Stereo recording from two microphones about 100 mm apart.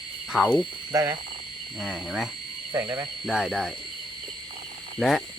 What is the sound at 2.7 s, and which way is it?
Speech, 25° right (ahead or behind).